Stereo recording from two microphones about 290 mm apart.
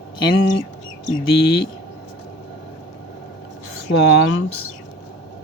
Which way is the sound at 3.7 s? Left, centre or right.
Left.